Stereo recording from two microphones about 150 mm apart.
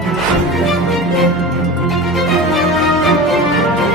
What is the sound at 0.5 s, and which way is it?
Music, centre (ahead or behind).